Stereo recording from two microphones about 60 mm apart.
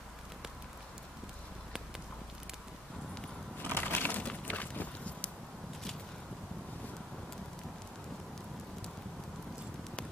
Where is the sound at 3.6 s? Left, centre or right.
Left.